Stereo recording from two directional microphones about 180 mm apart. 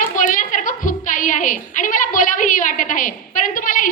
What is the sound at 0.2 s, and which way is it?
A woman's voice, 45° left (ahead or behind).